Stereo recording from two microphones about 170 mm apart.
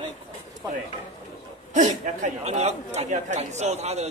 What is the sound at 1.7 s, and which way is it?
A man's voice, 45° right (ahead or behind).